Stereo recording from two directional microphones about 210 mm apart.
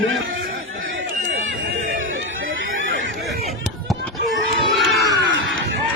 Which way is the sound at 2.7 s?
65° right (ahead or behind).